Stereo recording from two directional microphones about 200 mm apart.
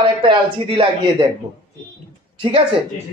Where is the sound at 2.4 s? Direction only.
30° right (ahead or behind).